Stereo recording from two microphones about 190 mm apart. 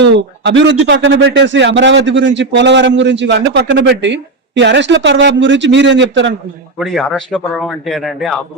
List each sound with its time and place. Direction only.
0.0 s a man's voice: 65° right (ahead or behind)
6.7 s a man's voice: centre (ahead or behind)